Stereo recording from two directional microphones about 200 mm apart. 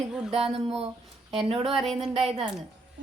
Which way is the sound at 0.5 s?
30° right (ahead or behind).